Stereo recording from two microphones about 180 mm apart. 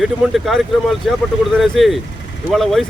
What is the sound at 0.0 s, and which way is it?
Speech, centre (ahead or behind).